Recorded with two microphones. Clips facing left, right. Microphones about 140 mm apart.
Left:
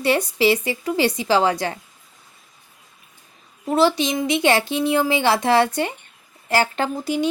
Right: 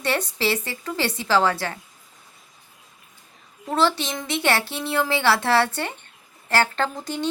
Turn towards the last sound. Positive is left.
turn(degrees=10)  # may be behind; listen again after turning